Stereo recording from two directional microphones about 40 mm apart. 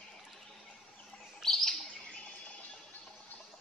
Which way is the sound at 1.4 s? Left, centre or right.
Centre.